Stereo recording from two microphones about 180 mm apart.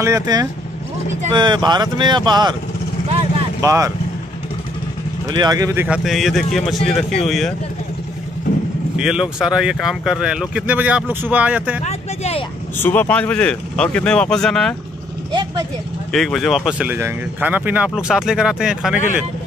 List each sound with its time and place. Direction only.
0.0 s speech: 20° right (ahead or behind)
3.6 s speech: 15° right (ahead or behind)
5.3 s speech: 20° right (ahead or behind)
5.9 s speech: centre (ahead or behind)
8.9 s speech: 5° right (ahead or behind)
11.8 s speech: 35° left (ahead or behind)
12.7 s speech: 10° left (ahead or behind)
16.1 s speech: centre (ahead or behind)